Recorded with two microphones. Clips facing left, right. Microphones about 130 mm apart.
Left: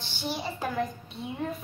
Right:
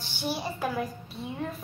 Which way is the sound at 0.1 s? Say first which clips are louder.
Right 1 dB; 10° right (ahead or behind).